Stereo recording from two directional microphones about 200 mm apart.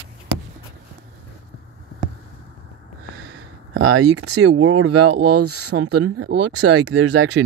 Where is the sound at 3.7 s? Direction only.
90° right.